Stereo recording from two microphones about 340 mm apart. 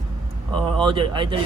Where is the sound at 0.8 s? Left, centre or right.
Centre.